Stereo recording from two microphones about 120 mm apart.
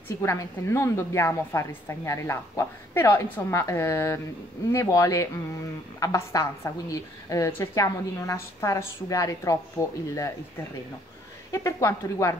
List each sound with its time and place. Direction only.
0.2 s a woman's voice: 20° left (ahead or behind)
11.5 s a woman's voice: 25° left (ahead or behind)